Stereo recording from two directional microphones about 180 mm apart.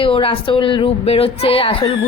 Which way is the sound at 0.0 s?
30° left (ahead or behind).